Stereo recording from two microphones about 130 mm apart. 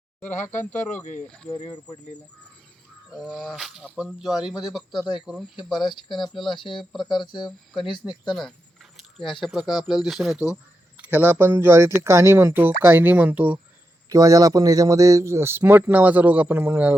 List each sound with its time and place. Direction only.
0.3 s speech: 70° left (ahead or behind)
1.5 s speech: 60° left (ahead or behind)
3.1 s speech: 5° right (ahead or behind)
5.9 s speech: 35° left (ahead or behind)
6.1 s speech: centre (ahead or behind)
6.5 s speech: 40° left (ahead or behind)
6.9 s speech: centre (ahead or behind)
7.2 s speech: 35° left (ahead or behind)
8.4 s keys jangling: centre (ahead or behind)
9.3 s speech: centre (ahead or behind)
11.2 s speech: 15° right (ahead or behind)
14.1 s a man's voice: 25° right (ahead or behind)